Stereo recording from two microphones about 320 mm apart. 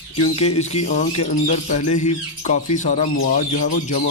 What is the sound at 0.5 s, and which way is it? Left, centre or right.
Speech, centre.